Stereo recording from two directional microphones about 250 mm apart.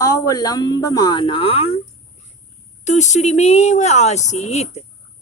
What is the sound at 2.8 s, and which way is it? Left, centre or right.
Speech, left.